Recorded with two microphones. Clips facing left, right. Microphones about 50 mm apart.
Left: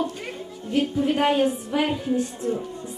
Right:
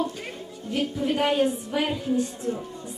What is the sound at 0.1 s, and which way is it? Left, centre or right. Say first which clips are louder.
Music: left 2 dB; centre.